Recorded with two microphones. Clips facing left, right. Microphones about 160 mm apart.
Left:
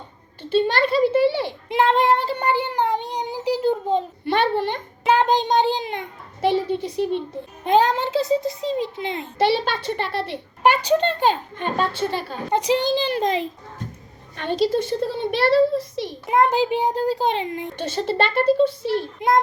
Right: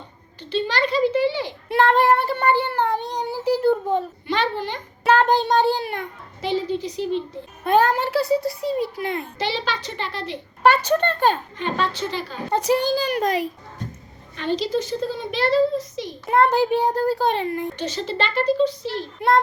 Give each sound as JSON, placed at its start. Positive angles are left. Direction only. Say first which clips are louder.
{"t": 0.5, "sound": "a woman's voice", "louder": "left 3 dB", "side_deg": 50}
{"t": 1.7, "sound": "child singing", "louder": "right 1 dB", "side_deg": 15}
{"t": 4.3, "sound": "a woman's voice", "louder": "left 4 dB", "side_deg": 60}
{"t": 5.0, "sound": "child singing", "louder": "right 1 dB", "side_deg": 15}
{"t": 6.4, "sound": "a woman's voice", "louder": "left 3 dB", "side_deg": 60}
{"t": 7.6, "sound": "a child's voice", "louder": "even", "side_deg": 15}
{"t": 9.4, "sound": "a woman's voice", "louder": "left 9 dB", "side_deg": 55}
{"t": 10.6, "sound": "child singing", "louder": "even", "side_deg": 15}
{"t": 11.6, "sound": "speech", "louder": "left 2 dB", "side_deg": 50}
{"t": 12.5, "sound": "a child's voice", "louder": "even", "side_deg": 20}
{"t": 14.3, "sound": "a woman's voice", "louder": "left 2 dB", "side_deg": 55}
{"t": 16.2, "sound": "child singing", "louder": "right 1 dB", "side_deg": 15}
{"t": 17.7, "sound": "speech", "louder": "left 3 dB", "side_deg": 55}
{"t": 19.2, "sound": "child singing", "louder": "right 2 dB", "side_deg": 15}